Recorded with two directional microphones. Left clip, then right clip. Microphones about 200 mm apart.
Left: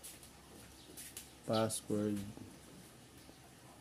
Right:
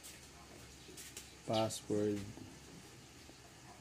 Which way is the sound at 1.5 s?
25° left (ahead or behind).